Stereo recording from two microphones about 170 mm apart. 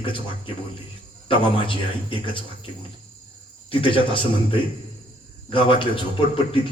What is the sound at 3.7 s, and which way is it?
A man's voice, 30° left (ahead or behind).